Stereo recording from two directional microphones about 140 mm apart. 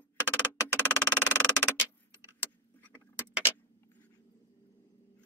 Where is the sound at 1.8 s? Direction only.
15° right (ahead or behind).